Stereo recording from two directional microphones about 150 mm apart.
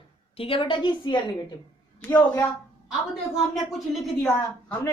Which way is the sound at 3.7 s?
Centre (ahead or behind).